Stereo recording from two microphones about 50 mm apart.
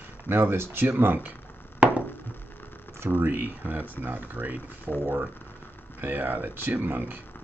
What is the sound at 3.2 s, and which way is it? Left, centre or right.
Speech, right.